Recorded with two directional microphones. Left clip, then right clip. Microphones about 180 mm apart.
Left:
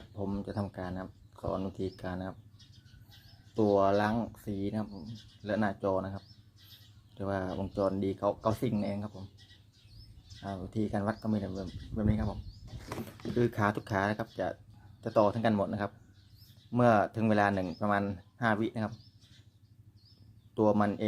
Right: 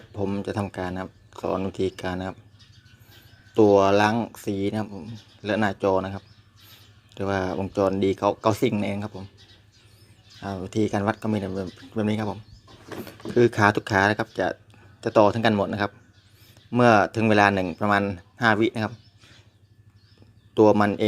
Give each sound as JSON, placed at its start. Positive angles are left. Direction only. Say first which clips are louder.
{"t": 0.1, "sound": "speech", "louder": "right 10 dB", "side_deg": -15}
{"t": 3.5, "sound": "speech", "louder": "right 9 dB", "side_deg": -20}
{"t": 10.4, "sound": "speech", "louder": "right 10 dB", "side_deg": -20}
{"t": 13.3, "sound": "speech", "louder": "right 11 dB", "side_deg": -15}
{"t": 20.5, "sound": "speech", "louder": "right 10 dB", "side_deg": -15}